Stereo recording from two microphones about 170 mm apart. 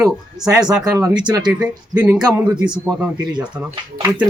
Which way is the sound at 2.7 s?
5° right (ahead or behind).